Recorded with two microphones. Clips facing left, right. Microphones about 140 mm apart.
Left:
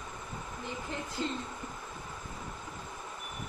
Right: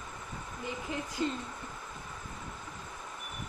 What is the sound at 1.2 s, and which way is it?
Speech, 10° right (ahead or behind).